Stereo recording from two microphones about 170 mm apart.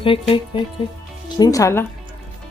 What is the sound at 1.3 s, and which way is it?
Speech, 20° left (ahead or behind).